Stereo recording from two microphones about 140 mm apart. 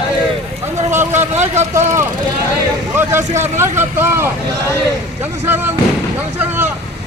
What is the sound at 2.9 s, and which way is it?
A man's voice, 20° right (ahead or behind).